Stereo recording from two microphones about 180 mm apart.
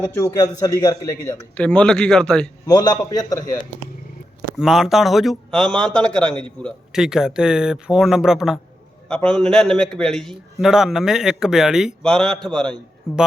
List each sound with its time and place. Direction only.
0.0 s a man's voice: 15° left (ahead or behind)
1.5 s a man's voice: 5° left (ahead or behind)
2.6 s a man's voice: 20° left (ahead or behind)
4.5 s a man's voice: centre (ahead or behind)